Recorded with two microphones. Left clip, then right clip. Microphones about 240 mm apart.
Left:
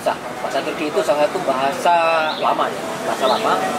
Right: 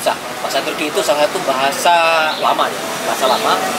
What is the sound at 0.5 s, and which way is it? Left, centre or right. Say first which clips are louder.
Speech: right 2 dB; left.